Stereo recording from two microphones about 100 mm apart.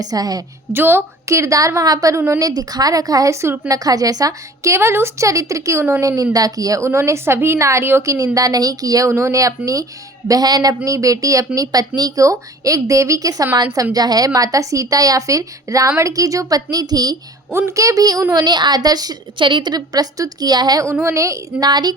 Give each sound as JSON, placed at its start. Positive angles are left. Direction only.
{"t": 0.0, "sound": "a woman's voice", "side_deg": -40}
{"t": 0.7, "sound": "a woman's voice", "side_deg": -20}
{"t": 2.4, "sound": "a woman's voice", "side_deg": -40}
{"t": 17.5, "sound": "a woman's voice", "side_deg": -25}
{"t": 18.4, "sound": "a woman's voice", "side_deg": -45}
{"t": 21.0, "sound": "a woman's voice", "side_deg": -30}
{"t": 21.7, "sound": "a woman's voice", "side_deg": -45}